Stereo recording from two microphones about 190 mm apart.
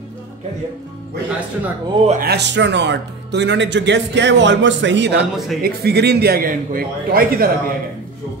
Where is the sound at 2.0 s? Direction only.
50° right (ahead or behind).